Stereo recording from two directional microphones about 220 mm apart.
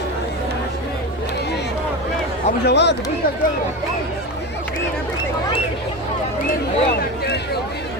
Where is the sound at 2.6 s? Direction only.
50° left (ahead or behind).